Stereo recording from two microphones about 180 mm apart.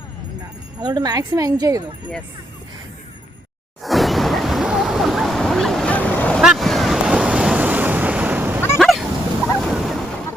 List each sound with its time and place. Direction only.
0.8 s speech: 25° right (ahead or behind)
3.8 s a sound: centre (ahead or behind)
8.8 s dog: centre (ahead or behind)
9.6 s music: centre (ahead or behind)